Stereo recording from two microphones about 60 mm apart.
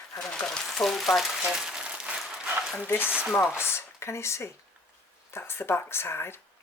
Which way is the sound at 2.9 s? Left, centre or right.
Left.